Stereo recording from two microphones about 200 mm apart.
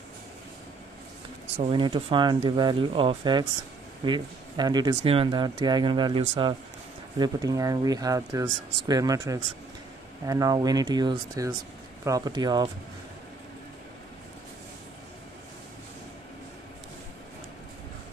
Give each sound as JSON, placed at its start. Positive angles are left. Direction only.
{"t": 1.6, "sound": "speech", "side_deg": -25}